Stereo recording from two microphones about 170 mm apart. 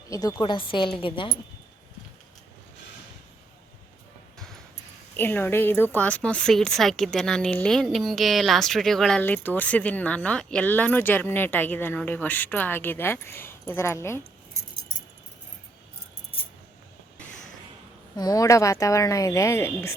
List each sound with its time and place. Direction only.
0.1 s speech: 20° left (ahead or behind)
5.1 s a woman's voice: 10° left (ahead or behind)
18.2 s speech: 20° left (ahead or behind)